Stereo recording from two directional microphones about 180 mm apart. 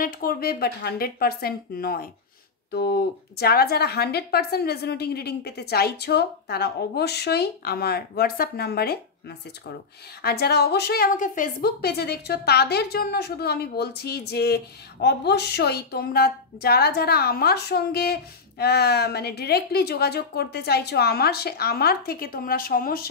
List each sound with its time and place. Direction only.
0.0 s a woman's voice: 55° left (ahead or behind)
10.2 s a woman's voice: 60° left (ahead or behind)